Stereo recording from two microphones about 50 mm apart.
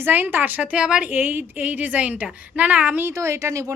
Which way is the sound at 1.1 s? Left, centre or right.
Right.